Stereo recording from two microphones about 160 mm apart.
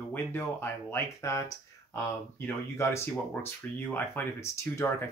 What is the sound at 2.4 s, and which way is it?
Speech, 15° left (ahead or behind).